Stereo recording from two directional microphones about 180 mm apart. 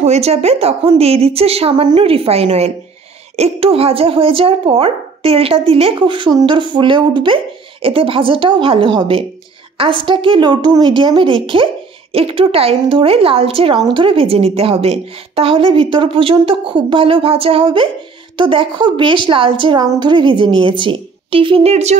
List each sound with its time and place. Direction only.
0.0 s speech: 35° right (ahead or behind)